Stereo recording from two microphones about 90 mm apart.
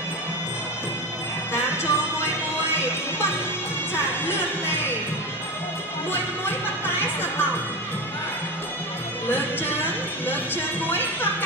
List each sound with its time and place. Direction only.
1.5 s music: 30° left (ahead or behind)
7.0 s music: 25° left (ahead or behind)
9.3 s speech: 25° left (ahead or behind)